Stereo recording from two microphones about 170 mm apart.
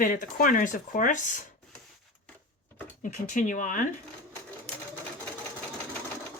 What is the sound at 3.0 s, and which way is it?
Speech, 50° left (ahead or behind).